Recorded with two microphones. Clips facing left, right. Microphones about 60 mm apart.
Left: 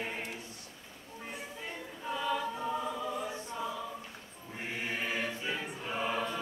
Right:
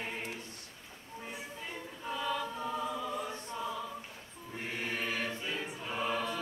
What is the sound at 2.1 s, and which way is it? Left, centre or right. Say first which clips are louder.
Choir: left 2 dB; centre.